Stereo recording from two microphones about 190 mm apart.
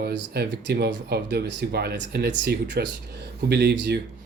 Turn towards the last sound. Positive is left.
turn(degrees=-65)  # may be behind; listen again after turning